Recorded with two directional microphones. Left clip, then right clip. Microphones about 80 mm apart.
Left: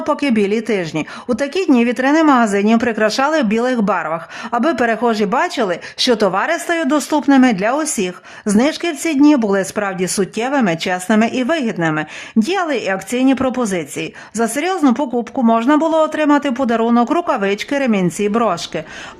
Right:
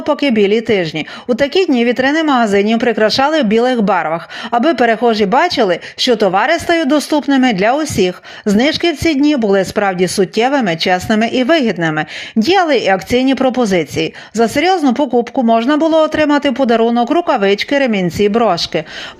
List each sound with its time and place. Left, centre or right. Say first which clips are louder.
0.0 s speech: right 4 dB; centre
3.9 s speech: right 4 dB; right
4.6 s speech: right 4 dB; centre
6.0 s speech: right 1 dB; centre
6.3 s speech: right 5 dB; right
6.8 s speech: right 2 dB; centre
9.8 s speech: right 5 dB; right
16.9 s speech: right 2 dB; centre
17.2 s speech: right 5 dB; centre